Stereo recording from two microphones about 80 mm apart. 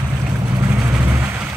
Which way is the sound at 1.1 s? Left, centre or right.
Right.